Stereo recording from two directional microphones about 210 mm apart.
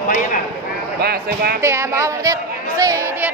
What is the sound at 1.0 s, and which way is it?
Speech, 50° right (ahead or behind).